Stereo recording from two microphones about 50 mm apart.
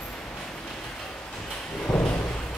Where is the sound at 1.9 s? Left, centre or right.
Left.